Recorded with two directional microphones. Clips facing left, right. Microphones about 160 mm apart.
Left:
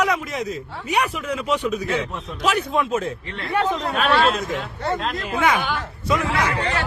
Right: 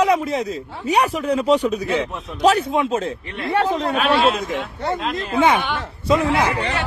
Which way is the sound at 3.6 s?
30° right (ahead or behind).